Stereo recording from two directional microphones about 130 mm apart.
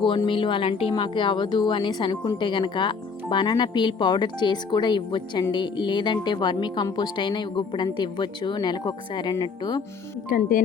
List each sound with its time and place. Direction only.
0.3 s a woman's voice: 40° left (ahead or behind)
10.2 s speech: 90° left